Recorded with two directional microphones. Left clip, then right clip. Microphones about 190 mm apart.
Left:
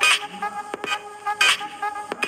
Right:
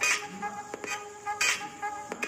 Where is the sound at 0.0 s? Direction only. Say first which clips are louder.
Left 9 dB; 30° left (ahead or behind).